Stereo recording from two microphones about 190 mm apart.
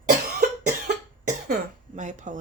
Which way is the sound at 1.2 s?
40° right (ahead or behind).